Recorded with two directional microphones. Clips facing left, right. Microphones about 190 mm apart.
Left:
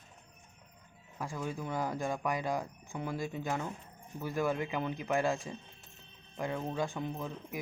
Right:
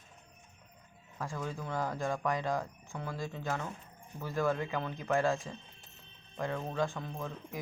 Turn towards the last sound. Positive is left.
turn(degrees=15)  # may be behind; listen again after turning